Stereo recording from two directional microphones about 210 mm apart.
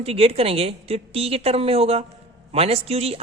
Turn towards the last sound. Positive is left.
turn(degrees=-30)  # may be behind; listen again after turning